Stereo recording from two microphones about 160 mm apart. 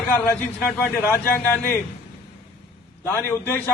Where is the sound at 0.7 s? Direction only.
10° left (ahead or behind).